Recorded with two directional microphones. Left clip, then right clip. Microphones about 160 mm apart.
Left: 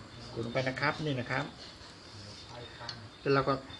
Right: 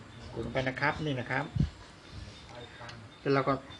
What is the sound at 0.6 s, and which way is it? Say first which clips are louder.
Speech: right 1 dB; 20° right (ahead or behind).